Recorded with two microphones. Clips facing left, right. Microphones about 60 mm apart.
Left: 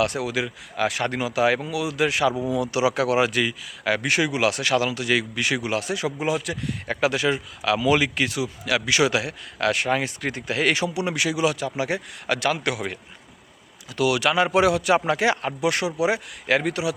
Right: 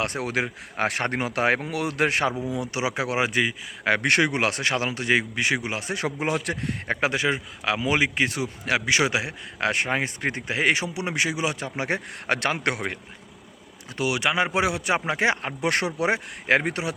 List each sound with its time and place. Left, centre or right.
0.0 s speech: right
2.5 s speech: right
3.8 s speech: right
6.0 s speech: right
13.9 s speech: right
15.6 s speech: right